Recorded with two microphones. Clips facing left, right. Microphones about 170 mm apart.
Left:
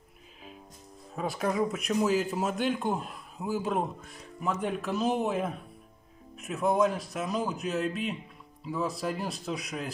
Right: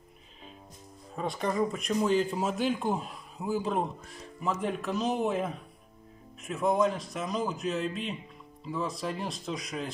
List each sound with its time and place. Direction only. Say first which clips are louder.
1.1 s speech: left 1 dB; 5° left (ahead or behind)